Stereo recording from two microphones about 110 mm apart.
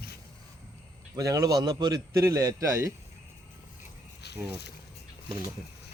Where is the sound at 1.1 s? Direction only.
30° right (ahead or behind).